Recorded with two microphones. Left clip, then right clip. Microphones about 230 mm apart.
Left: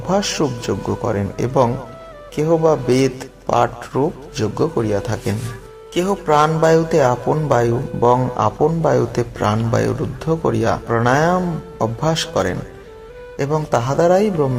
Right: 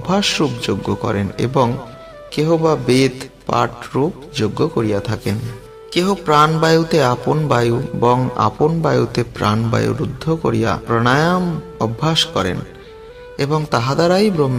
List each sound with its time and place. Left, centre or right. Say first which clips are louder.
0.1 s a man's voice: right 1 dB; right
13.7 s a man's voice: left 2 dB; right